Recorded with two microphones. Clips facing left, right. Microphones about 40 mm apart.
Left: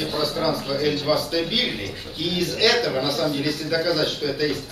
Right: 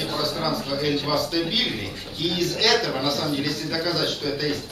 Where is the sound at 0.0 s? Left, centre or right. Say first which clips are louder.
Left 2 dB; centre.